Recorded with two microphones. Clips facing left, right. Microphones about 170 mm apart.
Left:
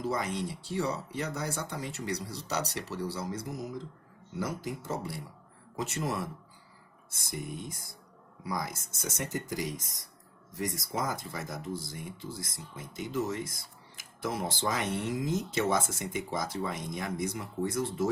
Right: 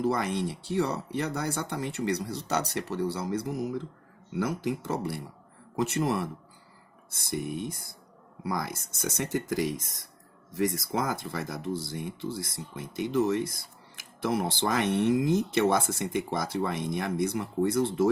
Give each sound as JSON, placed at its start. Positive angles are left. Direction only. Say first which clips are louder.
{"t": 0.0, "sound": "speech", "louder": "right 5 dB", "side_deg": -65}
{"t": 10.9, "sound": "speech", "louder": "right 4 dB", "side_deg": -65}